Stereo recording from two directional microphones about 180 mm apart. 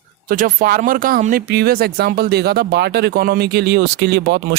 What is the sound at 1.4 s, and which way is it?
Speech, 65° right (ahead or behind).